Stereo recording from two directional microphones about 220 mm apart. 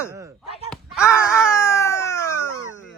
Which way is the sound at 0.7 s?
Centre (ahead or behind).